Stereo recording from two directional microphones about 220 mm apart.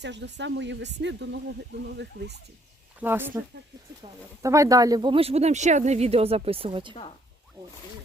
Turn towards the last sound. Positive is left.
turn(degrees=-25)  # may be behind; listen again after turning